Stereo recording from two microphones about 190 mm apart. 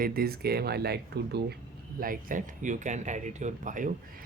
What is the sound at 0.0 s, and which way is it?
Speech, 50° right (ahead or behind).